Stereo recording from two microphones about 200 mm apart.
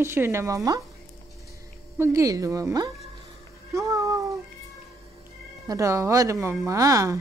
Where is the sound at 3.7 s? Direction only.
15° right (ahead or behind).